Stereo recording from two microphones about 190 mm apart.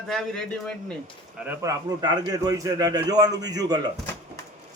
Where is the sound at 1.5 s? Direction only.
20° right (ahead or behind).